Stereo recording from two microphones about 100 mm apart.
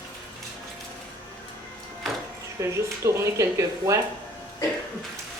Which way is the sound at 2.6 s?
30° right (ahead or behind).